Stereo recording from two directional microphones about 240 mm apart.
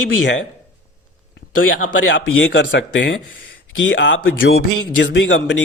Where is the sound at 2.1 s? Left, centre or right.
Left.